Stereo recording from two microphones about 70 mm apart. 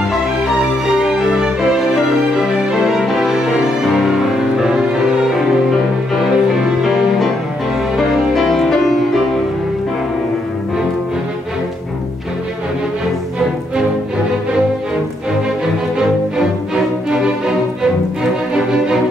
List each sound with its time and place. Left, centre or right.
0.8 s music: centre
6.3 s music: centre
16.7 s music: centre
18.5 s music: centre